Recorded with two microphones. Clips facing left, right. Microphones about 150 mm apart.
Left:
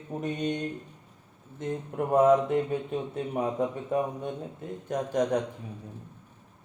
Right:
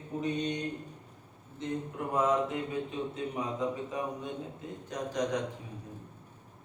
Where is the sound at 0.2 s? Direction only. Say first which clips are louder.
Left 2 dB; 50° left (ahead or behind).